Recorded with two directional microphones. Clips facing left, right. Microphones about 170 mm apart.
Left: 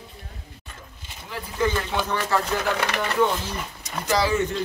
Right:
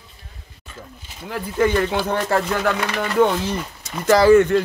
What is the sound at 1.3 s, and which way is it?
Speech, 60° right (ahead or behind).